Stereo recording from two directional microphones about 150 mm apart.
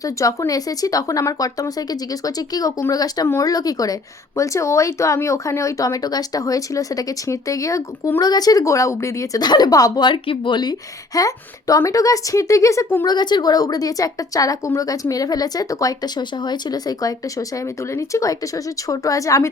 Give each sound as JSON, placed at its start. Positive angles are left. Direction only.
{"t": 0.2, "sound": "speech", "side_deg": 20}